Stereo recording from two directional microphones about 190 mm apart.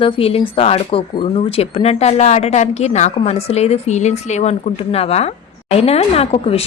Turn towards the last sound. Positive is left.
turn(degrees=30)  # may be behind; listen again after turning